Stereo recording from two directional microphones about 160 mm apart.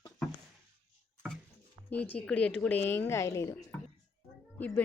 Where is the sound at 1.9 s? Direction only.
10° left (ahead or behind).